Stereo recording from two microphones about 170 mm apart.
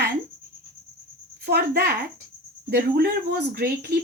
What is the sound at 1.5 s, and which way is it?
A woman's voice, 70° right (ahead or behind).